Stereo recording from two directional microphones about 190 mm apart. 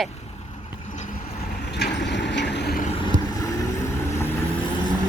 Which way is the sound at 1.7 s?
60° left (ahead or behind).